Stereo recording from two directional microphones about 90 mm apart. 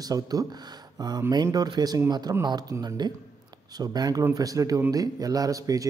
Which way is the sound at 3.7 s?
45° right (ahead or behind).